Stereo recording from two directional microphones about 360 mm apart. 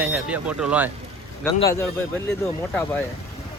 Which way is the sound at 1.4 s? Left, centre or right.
Centre.